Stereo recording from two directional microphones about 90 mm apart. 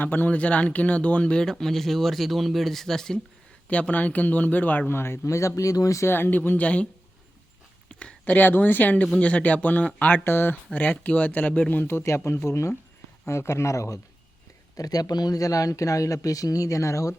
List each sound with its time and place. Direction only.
0.0 s a man's voice: 20° left (ahead or behind)
7.9 s a man's voice: 15° left (ahead or behind)
10.7 s a man's voice: 10° left (ahead or behind); by 17.2 s 35° left (ahead or behind)